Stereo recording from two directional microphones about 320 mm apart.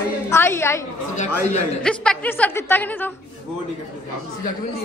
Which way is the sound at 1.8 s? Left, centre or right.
Centre.